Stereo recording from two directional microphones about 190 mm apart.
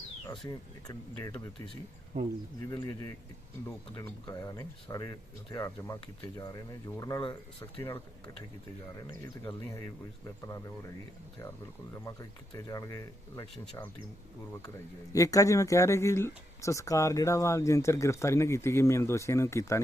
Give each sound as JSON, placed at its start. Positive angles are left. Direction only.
{"t": 0.3, "sound": "speech", "side_deg": 20}
{"t": 2.6, "sound": "speech", "side_deg": 20}
{"t": 9.2, "sound": "speech", "side_deg": 15}
{"t": 12.5, "sound": "speech", "side_deg": 15}
{"t": 15.1, "sound": "speech", "side_deg": 15}